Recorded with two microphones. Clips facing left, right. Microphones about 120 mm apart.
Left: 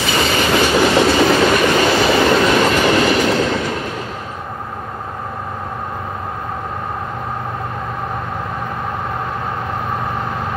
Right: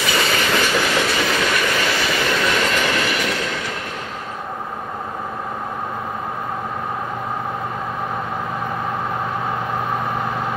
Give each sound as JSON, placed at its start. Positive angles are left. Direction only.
{"t": 0.3, "sound": "train", "side_deg": 25}